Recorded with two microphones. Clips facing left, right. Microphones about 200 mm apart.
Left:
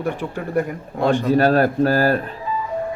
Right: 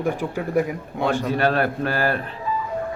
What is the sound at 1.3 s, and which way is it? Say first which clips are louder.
Speech: left 5 dB; 40° left (ahead or behind).